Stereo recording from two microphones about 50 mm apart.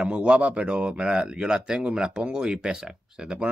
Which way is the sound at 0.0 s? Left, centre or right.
Right.